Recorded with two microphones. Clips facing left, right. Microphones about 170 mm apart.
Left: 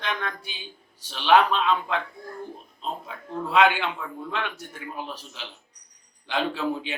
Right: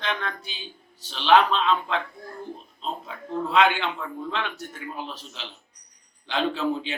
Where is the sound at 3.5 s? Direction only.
5° left (ahead or behind).